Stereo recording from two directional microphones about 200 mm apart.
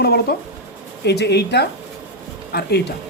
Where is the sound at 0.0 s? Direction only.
50° left (ahead or behind).